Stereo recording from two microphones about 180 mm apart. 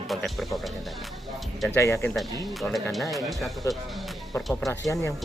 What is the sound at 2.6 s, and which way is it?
Speech, centre (ahead or behind).